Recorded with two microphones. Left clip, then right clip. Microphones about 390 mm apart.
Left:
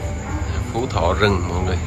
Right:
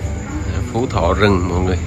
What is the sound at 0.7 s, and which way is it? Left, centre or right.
Speech, centre.